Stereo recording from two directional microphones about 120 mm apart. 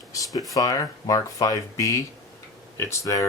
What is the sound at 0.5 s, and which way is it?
Speech, 30° left (ahead or behind).